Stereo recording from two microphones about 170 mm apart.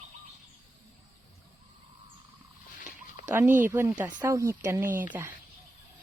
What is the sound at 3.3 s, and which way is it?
Speech, 15° right (ahead or behind).